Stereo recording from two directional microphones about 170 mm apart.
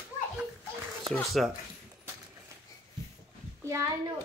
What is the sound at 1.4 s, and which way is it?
Speech, centre (ahead or behind).